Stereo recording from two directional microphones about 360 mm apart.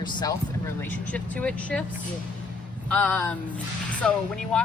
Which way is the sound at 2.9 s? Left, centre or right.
Centre.